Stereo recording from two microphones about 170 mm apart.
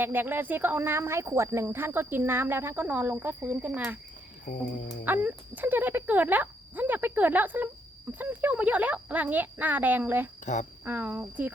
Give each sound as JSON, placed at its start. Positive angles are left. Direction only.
{"t": 0.0, "sound": "speech", "side_deg": -10}
{"t": 4.5, "sound": "a sound", "side_deg": 55}
{"t": 5.0, "sound": "speech", "side_deg": -10}
{"t": 10.4, "sound": "speech", "side_deg": 45}
{"t": 10.8, "sound": "speech", "side_deg": -10}